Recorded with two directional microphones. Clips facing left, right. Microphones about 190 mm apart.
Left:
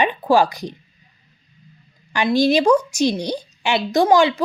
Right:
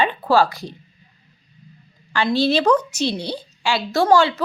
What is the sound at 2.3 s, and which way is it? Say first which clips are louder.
A woman's voice: left 2 dB; 15° left (ahead or behind).